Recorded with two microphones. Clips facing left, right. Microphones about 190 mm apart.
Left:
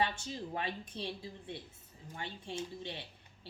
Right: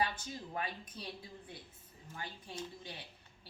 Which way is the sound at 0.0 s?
25° left (ahead or behind).